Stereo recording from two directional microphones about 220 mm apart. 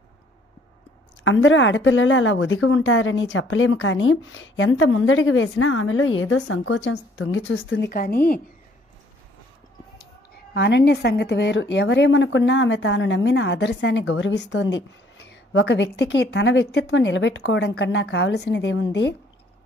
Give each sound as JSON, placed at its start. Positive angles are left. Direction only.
{"t": 1.2, "sound": "a woman's voice", "side_deg": 60}
{"t": 7.9, "sound": "a woman's voice", "side_deg": 40}
{"t": 9.9, "sound": "a woman's voice", "side_deg": 45}